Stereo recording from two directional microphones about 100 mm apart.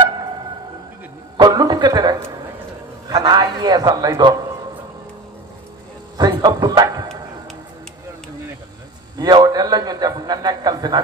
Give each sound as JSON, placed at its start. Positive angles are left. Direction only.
{"t": 1.3, "sound": "a man's voice", "side_deg": -45}
{"t": 6.3, "sound": "a man's voice", "side_deg": -45}
{"t": 9.2, "sound": "a man's voice", "side_deg": -45}